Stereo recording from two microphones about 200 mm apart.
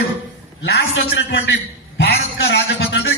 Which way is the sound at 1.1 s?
65° left (ahead or behind).